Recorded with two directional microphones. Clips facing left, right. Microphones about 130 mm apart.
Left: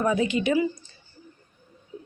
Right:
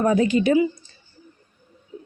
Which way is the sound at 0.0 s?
40° right (ahead or behind).